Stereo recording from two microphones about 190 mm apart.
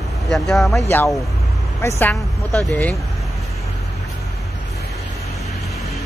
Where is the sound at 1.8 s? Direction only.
15° left (ahead or behind).